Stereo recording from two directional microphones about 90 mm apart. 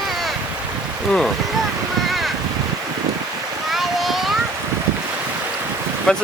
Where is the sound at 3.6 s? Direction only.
Centre (ahead or behind).